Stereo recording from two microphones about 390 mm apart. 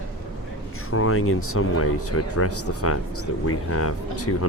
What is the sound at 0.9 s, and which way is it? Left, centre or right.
Speech, left.